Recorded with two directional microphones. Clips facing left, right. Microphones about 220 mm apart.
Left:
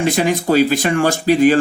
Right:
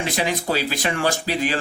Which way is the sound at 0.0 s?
50° left (ahead or behind).